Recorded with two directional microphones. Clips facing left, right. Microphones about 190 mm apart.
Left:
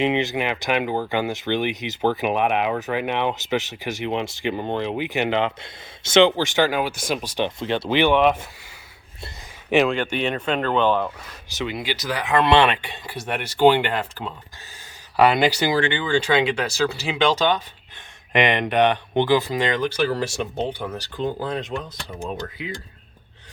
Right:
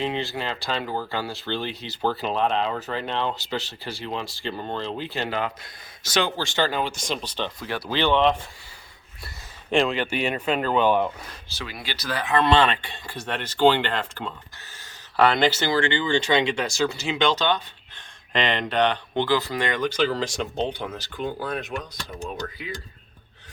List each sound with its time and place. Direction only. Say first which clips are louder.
0.0 s speech: left 6 dB; 20° left (ahead or behind)
7.6 s speech: left 5 dB; 25° left (ahead or behind)
9.6 s speech: left 3 dB; 5° left (ahead or behind); by 11.1 s 15° right (ahead or behind)
11.4 s speech: left 9 dB; 20° left (ahead or behind)
17.2 s speech: left 3 dB; 10° left (ahead or behind)